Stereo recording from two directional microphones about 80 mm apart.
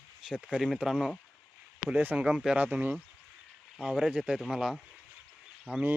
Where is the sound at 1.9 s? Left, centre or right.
Centre.